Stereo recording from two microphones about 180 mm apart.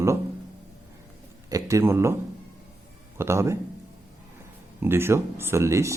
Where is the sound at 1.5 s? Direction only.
20° right (ahead or behind).